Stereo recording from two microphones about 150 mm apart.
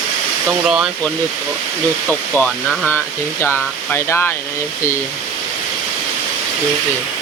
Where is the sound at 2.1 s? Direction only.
5° left (ahead or behind).